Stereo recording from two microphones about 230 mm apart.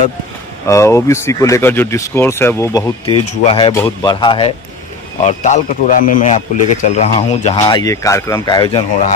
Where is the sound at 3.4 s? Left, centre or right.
Left.